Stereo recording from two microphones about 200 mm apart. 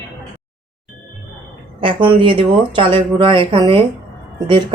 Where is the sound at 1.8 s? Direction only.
25° right (ahead or behind).